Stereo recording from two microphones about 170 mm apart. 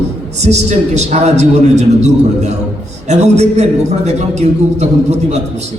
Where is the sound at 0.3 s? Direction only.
40° right (ahead or behind).